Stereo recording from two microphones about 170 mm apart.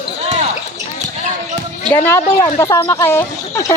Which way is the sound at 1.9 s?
15° left (ahead or behind).